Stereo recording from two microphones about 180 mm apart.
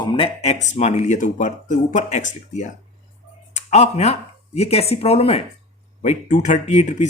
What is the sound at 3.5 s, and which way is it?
Speech, 40° left (ahead or behind).